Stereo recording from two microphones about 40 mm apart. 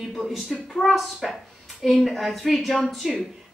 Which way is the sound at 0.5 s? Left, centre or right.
Centre.